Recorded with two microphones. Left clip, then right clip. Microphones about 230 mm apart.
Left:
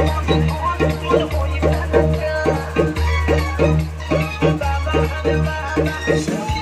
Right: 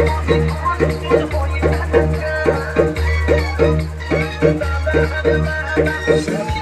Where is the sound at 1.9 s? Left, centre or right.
Left.